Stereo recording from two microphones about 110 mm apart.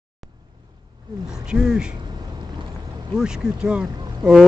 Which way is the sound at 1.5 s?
5° right (ahead or behind).